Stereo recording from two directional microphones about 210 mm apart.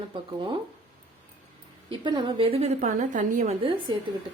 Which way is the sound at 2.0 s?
20° right (ahead or behind).